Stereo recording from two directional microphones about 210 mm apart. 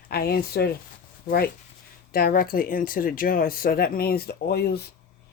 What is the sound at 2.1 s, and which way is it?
Speech, 45° left (ahead or behind).